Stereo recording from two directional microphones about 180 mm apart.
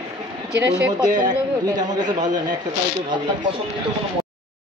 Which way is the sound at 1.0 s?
25° right (ahead or behind).